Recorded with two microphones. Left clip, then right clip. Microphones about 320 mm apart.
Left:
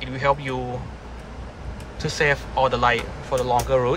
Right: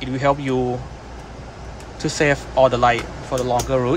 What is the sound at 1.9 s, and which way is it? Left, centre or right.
Speech, centre.